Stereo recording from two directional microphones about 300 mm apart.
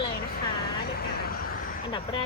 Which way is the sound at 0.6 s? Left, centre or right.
Left.